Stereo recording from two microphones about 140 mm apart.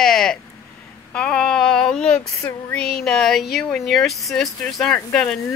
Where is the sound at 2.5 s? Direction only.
10° left (ahead or behind).